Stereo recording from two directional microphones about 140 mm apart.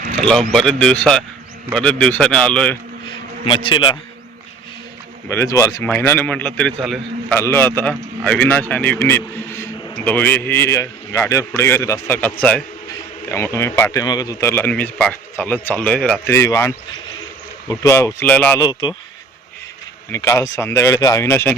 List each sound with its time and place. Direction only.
0.2 s a man's voice: 5° left (ahead or behind)
3.1 s a sound: 35° left (ahead or behind)
5.3 s speech: 20° left (ahead or behind)
5.8 s a man's voice: 15° left (ahead or behind)
16.2 s a man's voice: 20° left (ahead or behind)
18.6 s speech: 30° left (ahead or behind)
20.1 s speech: 20° left (ahead or behind)